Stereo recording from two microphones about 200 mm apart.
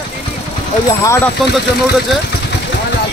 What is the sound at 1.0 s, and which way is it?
Speech, 15° left (ahead or behind).